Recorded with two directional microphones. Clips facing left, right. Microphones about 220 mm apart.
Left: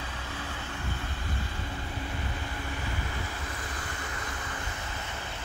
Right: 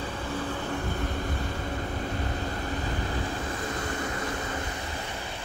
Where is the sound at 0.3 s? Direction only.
50° right (ahead or behind).